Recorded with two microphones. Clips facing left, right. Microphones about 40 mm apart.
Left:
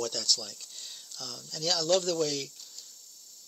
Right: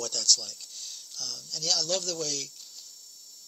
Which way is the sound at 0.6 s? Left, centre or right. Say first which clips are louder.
Right 1 dB; left.